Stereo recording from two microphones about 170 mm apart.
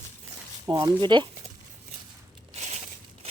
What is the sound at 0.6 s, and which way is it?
Speech, 25° right (ahead or behind).